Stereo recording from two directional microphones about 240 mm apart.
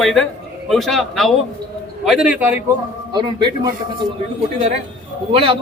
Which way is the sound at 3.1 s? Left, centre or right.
Centre.